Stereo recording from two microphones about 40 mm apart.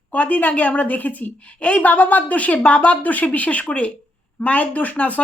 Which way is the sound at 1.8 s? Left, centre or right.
Left.